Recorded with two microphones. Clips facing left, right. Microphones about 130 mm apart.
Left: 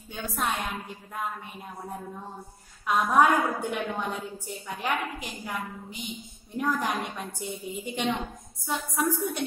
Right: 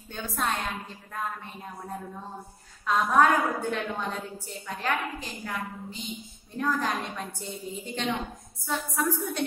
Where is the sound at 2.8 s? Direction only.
15° left (ahead or behind).